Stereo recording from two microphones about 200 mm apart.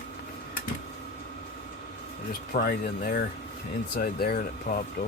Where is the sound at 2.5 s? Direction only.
45° left (ahead or behind).